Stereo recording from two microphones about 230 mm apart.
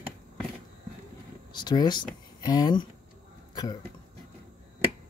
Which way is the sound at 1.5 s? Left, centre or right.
Centre.